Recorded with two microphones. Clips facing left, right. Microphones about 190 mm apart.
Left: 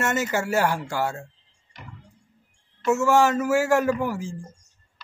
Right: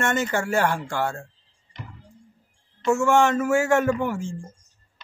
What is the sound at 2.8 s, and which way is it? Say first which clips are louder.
Speech: even; 5° left (ahead or behind).